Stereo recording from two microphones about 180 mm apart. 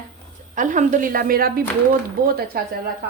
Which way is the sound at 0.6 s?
45° right (ahead or behind).